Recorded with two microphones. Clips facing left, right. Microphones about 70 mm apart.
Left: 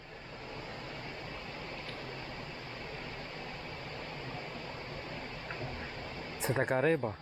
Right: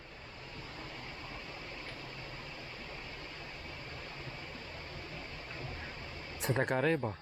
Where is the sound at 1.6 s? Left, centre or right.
Left.